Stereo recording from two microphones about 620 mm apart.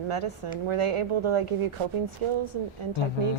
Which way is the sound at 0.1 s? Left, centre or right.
Right.